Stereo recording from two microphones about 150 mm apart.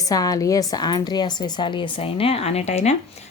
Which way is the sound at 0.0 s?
25° left (ahead or behind).